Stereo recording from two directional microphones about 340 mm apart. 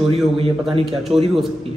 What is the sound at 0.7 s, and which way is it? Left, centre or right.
Speech, centre.